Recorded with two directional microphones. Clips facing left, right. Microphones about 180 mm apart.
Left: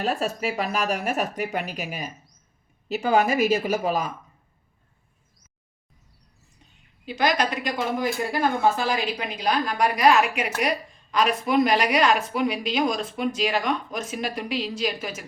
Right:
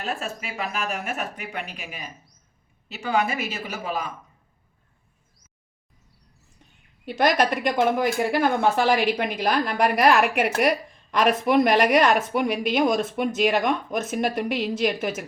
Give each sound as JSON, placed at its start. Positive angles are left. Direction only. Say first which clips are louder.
{"t": 0.0, "sound": "speech", "louder": "left 5 dB", "side_deg": 40}
{"t": 7.0, "sound": "a woman's voice", "louder": "right 3 dB", "side_deg": -55}